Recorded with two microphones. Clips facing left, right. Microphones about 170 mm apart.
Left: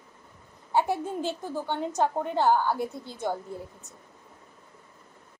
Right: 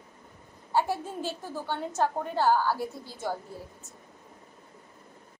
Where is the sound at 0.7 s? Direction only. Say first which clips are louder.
Left 2 dB; 20° left (ahead or behind).